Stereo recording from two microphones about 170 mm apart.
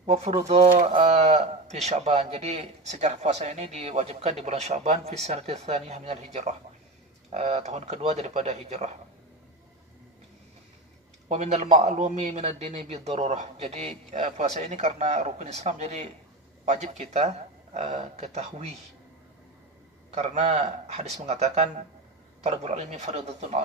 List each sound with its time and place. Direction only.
0.0 s speech: 40° right (ahead or behind)
11.2 s speech: 40° right (ahead or behind)
20.1 s speech: 40° right (ahead or behind)